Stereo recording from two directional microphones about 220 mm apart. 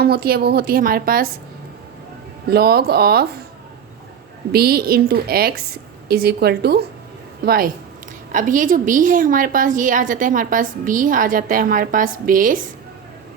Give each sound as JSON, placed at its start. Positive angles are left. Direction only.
{"t": 0.0, "sound": "a woman's voice", "side_deg": -45}
{"t": 2.5, "sound": "a woman's voice", "side_deg": -45}
{"t": 4.5, "sound": "a woman's voice", "side_deg": -45}